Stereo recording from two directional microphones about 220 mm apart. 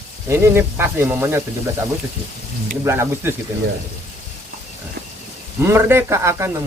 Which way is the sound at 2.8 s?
10° right (ahead or behind).